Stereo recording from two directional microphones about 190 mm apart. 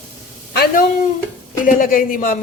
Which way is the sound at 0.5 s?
55° left (ahead or behind).